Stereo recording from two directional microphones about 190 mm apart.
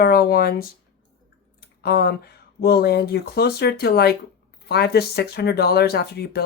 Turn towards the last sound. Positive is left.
turn(degrees=60)  # may be behind; listen again after turning